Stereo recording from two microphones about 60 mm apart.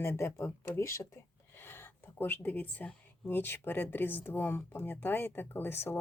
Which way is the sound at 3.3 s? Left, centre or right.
Left.